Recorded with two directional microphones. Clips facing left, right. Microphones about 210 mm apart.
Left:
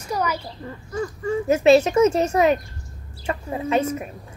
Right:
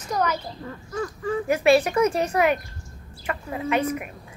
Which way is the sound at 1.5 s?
25° left (ahead or behind).